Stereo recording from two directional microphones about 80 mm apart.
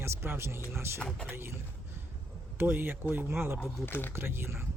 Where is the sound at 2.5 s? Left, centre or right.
Right.